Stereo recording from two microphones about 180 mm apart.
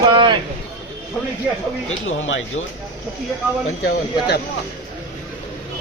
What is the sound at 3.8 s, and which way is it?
Speech, 60° left (ahead or behind).